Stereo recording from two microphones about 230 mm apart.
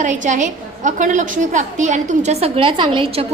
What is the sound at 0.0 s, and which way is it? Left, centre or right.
A woman's voice, right.